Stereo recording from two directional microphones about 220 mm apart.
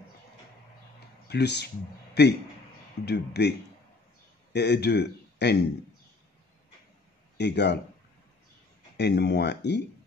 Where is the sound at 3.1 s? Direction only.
50° left (ahead or behind).